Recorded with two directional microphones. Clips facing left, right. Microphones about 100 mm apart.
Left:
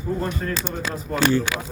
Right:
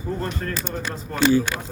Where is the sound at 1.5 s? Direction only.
90° left.